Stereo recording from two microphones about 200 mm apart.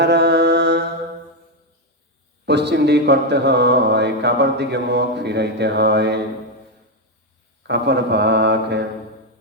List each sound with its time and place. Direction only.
0.0 s mantra: 60° right (ahead or behind)
2.5 s speech: 55° right (ahead or behind)
7.7 s speech: 60° right (ahead or behind)